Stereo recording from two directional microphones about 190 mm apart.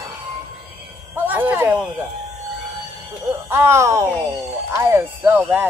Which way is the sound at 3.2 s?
15° right (ahead or behind).